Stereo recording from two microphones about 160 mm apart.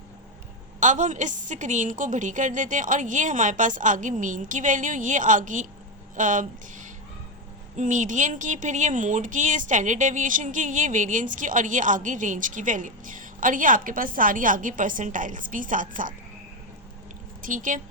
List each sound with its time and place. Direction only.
0.8 s speech: 50° right (ahead or behind)
17.4 s speech: 55° right (ahead or behind)